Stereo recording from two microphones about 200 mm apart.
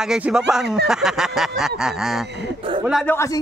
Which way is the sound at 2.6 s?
25° right (ahead or behind).